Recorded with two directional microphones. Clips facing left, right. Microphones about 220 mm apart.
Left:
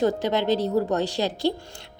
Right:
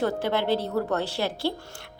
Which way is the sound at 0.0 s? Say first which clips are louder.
Left 3 dB; 15° left (ahead or behind).